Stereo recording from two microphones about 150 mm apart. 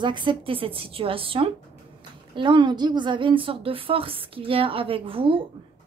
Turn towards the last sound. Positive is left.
turn(degrees=-40)  # may be behind; listen again after turning